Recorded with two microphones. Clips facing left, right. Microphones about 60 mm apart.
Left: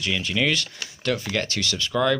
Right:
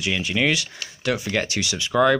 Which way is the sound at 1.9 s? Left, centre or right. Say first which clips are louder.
Right 4 dB; right.